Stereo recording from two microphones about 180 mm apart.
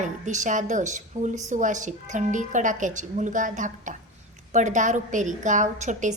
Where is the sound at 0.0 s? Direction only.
40° right (ahead or behind).